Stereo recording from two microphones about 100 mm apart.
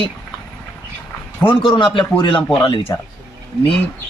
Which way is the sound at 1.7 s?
55° left (ahead or behind).